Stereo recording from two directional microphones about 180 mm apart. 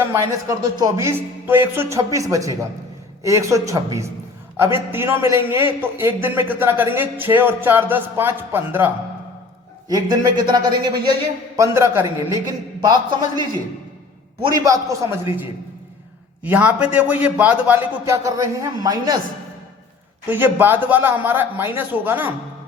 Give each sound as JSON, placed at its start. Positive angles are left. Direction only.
{"t": 0.0, "sound": "a man's voice", "side_deg": -15}
{"t": 9.9, "sound": "a man's voice", "side_deg": -25}
{"t": 14.4, "sound": "speech", "side_deg": -20}
{"t": 16.4, "sound": "a man's voice", "side_deg": -5}
{"t": 20.2, "sound": "a man's voice", "side_deg": -10}